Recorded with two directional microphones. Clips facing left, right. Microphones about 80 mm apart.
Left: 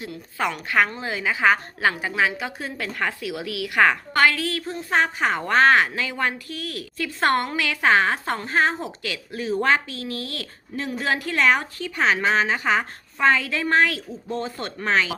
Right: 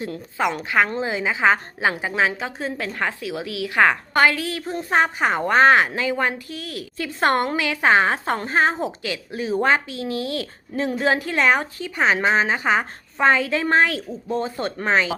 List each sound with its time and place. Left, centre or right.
0.9 s a woman's voice: right